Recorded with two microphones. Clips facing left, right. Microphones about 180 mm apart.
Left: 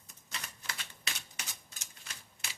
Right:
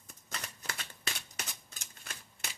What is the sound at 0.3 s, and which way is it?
Typewriter, 45° right (ahead or behind).